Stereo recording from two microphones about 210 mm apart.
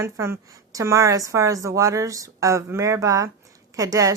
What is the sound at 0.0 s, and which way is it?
Speech, 10° right (ahead or behind).